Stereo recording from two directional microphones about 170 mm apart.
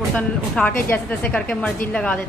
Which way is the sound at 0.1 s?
10° left (ahead or behind).